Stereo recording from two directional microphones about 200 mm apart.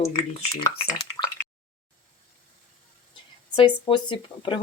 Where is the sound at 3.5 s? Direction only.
25° left (ahead or behind).